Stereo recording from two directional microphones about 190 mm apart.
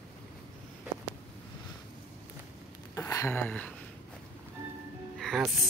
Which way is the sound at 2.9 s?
15° left (ahead or behind).